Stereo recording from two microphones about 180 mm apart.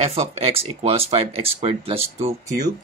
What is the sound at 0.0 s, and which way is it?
Speech, 35° right (ahead or behind).